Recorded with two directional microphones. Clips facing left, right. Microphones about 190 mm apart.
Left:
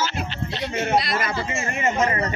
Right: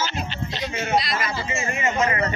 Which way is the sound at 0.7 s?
55° left (ahead or behind).